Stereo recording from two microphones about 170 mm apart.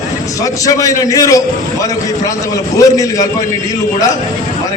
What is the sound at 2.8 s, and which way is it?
Speech, 20° left (ahead or behind).